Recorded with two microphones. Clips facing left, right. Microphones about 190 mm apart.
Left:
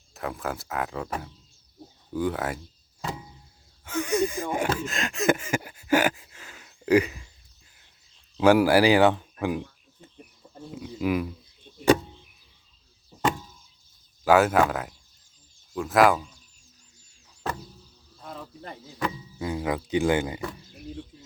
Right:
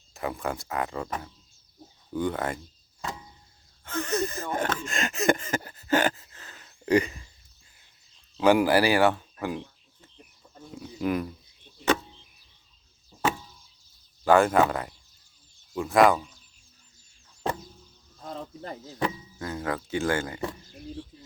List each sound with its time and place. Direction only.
0.1 s speech: centre (ahead or behind)
3.0 s vehicle: 5° left (ahead or behind)
3.8 s speech: 10° left (ahead or behind)
8.4 s speech: 5° left (ahead or behind)
10.0 s a sound: 15° left (ahead or behind)
10.7 s speech: 5° left (ahead or behind)
14.3 s speech: 5° left (ahead or behind)
18.2 s a sound: 30° right (ahead or behind)
19.4 s speech: 15° left (ahead or behind)